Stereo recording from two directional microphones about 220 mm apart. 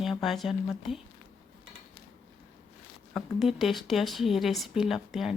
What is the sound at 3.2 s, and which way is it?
Speech, centre (ahead or behind).